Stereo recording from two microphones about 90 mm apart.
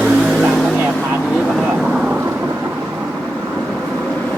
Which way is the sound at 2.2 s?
25° right (ahead or behind).